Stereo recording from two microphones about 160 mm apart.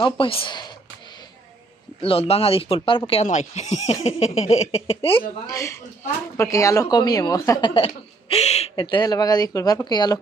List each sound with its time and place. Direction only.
0.0 s speech: 35° left (ahead or behind)
2.0 s speech: 35° left (ahead or behind)
6.3 s speech: 20° left (ahead or behind)
7.7 s speech: 40° left (ahead or behind)